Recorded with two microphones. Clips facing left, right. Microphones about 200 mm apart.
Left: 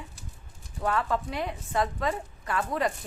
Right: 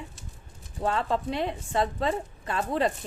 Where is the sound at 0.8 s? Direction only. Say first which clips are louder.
Right 1 dB; 25° right (ahead or behind).